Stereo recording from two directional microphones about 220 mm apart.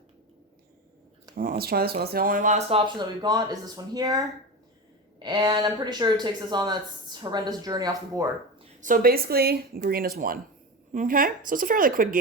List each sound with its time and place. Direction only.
1.4 s speech: 40° right (ahead or behind); by 4.2 s 15° right (ahead or behind)
5.2 s speech: 20° right (ahead or behind)
8.8 s speech: 40° right (ahead or behind)